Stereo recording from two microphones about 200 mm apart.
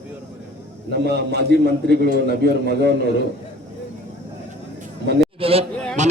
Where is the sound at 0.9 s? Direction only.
55° right (ahead or behind).